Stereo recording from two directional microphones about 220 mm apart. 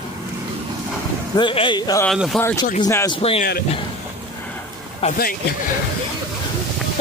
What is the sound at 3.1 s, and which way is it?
Speech, 25° left (ahead or behind).